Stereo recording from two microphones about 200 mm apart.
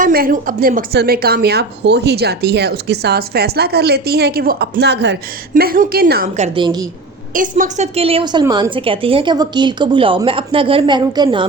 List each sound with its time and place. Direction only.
0.0 s a woman's voice: 45° right (ahead or behind)
5.5 s a woman's voice: 45° right (ahead or behind)
6.6 s a woman's voice: 20° right (ahead or behind)
7.3 s a woman's voice: 40° right (ahead or behind); by 11.4 s 25° right (ahead or behind)